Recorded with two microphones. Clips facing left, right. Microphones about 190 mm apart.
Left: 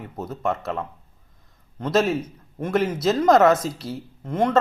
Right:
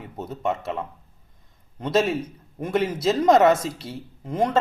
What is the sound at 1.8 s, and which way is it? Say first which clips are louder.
Speech: left 1 dB; 30° right (ahead or behind).